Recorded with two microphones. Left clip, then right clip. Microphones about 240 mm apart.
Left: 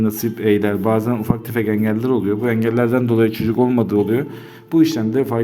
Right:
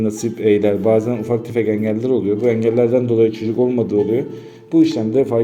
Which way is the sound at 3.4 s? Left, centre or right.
Left.